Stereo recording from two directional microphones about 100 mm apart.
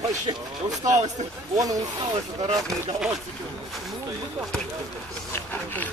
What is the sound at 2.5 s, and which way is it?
Speech, centre (ahead or behind).